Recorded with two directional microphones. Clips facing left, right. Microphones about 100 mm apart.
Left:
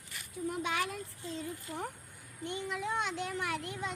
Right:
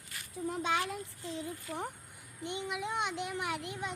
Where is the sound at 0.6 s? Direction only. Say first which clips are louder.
Right 4 dB; 25° right (ahead or behind).